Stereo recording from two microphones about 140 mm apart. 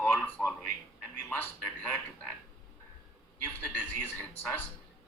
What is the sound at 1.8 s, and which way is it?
Speech, 10° left (ahead or behind).